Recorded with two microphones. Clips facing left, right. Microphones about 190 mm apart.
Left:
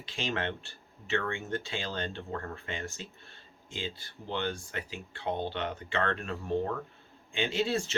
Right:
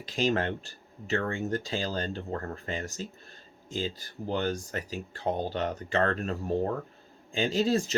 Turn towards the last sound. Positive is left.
turn(degrees=-40)  # may be behind; listen again after turning